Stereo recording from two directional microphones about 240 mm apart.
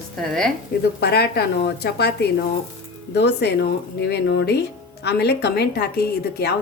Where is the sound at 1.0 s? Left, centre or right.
Left.